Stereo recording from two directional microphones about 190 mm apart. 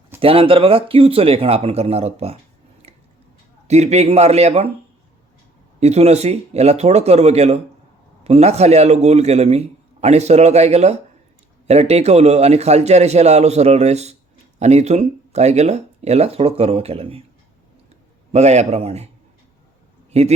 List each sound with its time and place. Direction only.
0.2 s speech: 30° right (ahead or behind)
2.8 s tick-tock: 30° right (ahead or behind)
3.7 s a man's voice: 35° right (ahead or behind)
5.8 s a man's voice: 35° right (ahead or behind)
18.3 s a man's voice: 35° right (ahead or behind)
20.1 s a sound: 35° right (ahead or behind)